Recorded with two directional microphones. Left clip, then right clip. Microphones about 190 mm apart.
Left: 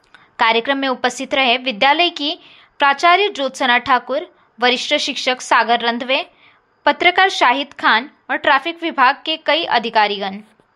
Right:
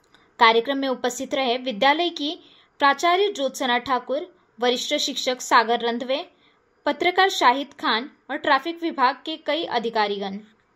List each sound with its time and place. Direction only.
0.1 s a woman's voice: centre (ahead or behind)